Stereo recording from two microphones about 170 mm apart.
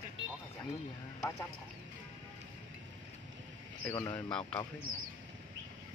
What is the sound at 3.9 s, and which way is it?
Speech, 25° left (ahead or behind).